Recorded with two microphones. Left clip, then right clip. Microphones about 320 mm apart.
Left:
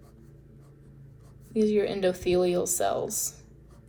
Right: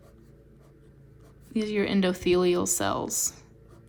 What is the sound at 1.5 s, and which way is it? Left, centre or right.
A woman's voice, right.